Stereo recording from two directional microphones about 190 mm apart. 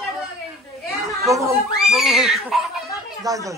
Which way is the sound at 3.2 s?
15° right (ahead or behind).